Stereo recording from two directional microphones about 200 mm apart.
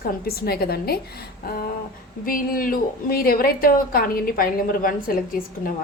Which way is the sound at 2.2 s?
45° left (ahead or behind).